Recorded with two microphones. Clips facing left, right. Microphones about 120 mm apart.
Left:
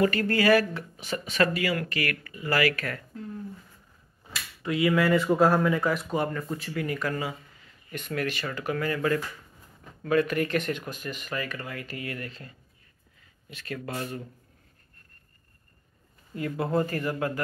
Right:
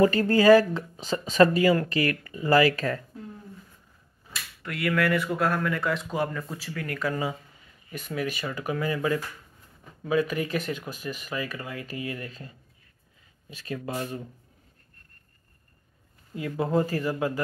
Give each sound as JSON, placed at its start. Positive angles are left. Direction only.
{"t": 0.0, "sound": "speech", "side_deg": -30}
{"t": 4.8, "sound": "speech", "side_deg": 20}
{"t": 5.7, "sound": "speech", "side_deg": 10}
{"t": 6.7, "sound": "speech", "side_deg": 10}
{"t": 7.9, "sound": "speech", "side_deg": -5}
{"t": 13.7, "sound": "speech", "side_deg": -15}
{"t": 16.3, "sound": "speech", "side_deg": -15}